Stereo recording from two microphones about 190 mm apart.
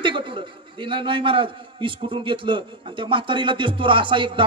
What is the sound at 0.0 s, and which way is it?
A man's voice, 25° right (ahead or behind).